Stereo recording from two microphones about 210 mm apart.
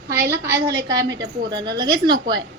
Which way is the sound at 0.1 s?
10° right (ahead or behind).